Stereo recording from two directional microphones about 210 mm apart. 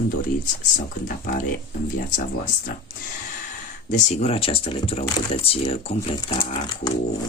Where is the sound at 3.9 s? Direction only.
35° left (ahead or behind).